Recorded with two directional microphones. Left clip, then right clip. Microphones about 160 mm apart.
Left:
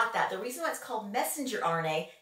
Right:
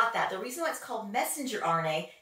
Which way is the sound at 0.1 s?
15° right (ahead or behind).